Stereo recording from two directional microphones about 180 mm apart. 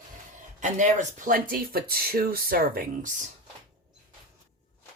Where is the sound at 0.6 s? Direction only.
45° right (ahead or behind).